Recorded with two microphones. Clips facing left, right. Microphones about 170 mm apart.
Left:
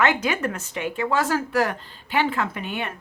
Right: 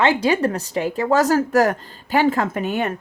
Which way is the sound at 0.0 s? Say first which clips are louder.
Right 5 dB; 30° right (ahead or behind).